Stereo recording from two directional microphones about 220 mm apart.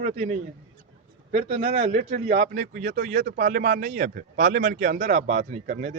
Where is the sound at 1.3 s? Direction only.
30° right (ahead or behind).